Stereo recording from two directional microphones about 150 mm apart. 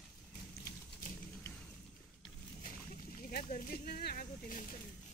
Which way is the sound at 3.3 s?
70° left (ahead or behind).